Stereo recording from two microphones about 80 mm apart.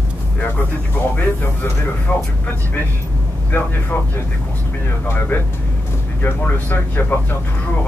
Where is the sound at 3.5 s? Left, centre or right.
Left.